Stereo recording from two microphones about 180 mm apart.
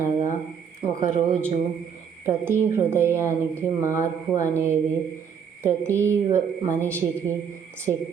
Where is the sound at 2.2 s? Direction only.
15° right (ahead or behind).